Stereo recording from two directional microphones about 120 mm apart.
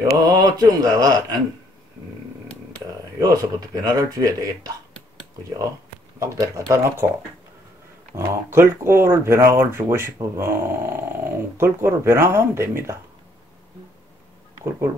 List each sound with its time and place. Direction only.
0.2 s speech: 30° right (ahead or behind)
3.2 s speech: 30° right (ahead or behind)
6.1 s speech: 25° right (ahead or behind)
8.2 s speech: 20° right (ahead or behind)